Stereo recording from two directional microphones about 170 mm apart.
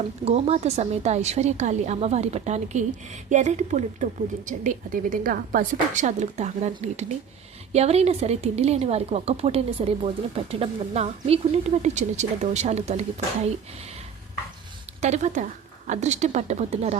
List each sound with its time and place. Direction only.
0.3 s a woman's voice: 35° right (ahead or behind)
15.0 s a woman's voice: 45° right (ahead or behind)